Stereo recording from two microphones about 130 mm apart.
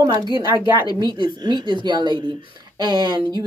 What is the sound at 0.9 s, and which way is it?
Speech, 35° right (ahead or behind).